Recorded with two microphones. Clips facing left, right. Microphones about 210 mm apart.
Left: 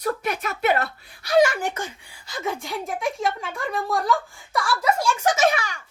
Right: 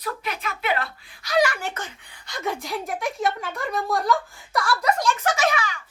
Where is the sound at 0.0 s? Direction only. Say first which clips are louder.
Left 5 dB; 45° left (ahead or behind).